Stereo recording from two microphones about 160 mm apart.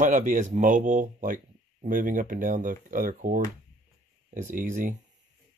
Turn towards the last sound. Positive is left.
turn(degrees=-55)  # may be behind; listen again after turning